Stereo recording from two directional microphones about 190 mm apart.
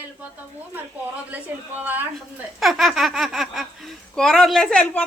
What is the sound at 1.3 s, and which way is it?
A woman's voice, 10° right (ahead or behind).